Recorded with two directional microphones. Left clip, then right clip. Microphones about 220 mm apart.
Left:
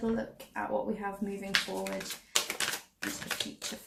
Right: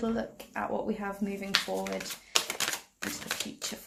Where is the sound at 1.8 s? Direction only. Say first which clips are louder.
Right 1 dB; 20° right (ahead or behind).